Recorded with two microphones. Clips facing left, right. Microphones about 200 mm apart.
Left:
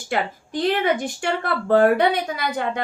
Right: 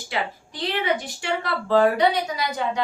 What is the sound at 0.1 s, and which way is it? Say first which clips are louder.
A woman's voice: left 5 dB; 50° left (ahead or behind).